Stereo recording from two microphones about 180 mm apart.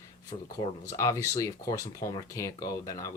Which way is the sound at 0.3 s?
30° left (ahead or behind).